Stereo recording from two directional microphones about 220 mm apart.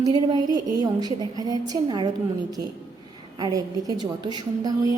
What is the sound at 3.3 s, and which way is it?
Speech, 20° right (ahead or behind).